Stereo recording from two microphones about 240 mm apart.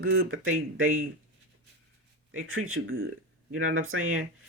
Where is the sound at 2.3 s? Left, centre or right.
Right.